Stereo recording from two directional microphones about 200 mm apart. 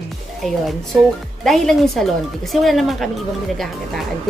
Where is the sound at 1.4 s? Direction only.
Centre (ahead or behind).